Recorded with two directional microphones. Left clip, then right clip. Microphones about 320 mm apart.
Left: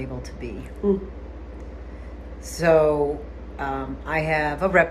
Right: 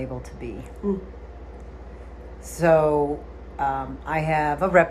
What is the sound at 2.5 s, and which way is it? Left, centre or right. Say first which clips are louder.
Speech: even; centre.